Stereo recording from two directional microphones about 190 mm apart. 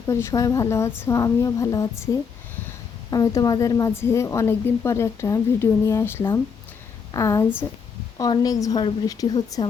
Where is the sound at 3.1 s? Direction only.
20° left (ahead or behind).